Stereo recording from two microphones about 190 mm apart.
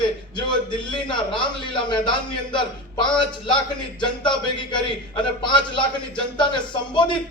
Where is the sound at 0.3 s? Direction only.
25° left (ahead or behind).